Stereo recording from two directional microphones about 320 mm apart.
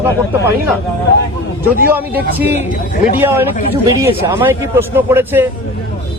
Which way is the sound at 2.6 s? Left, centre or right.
Left.